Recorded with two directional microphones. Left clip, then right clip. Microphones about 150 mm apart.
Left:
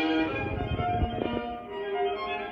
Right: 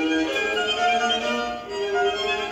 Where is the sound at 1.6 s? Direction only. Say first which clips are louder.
Right 7 dB; 20° right (ahead or behind).